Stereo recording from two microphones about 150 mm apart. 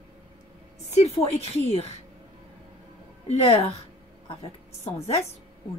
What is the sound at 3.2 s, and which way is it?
Speech, 45° left (ahead or behind).